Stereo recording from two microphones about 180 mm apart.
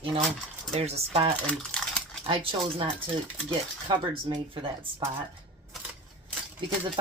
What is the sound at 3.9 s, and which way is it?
Speech, 30° right (ahead or behind).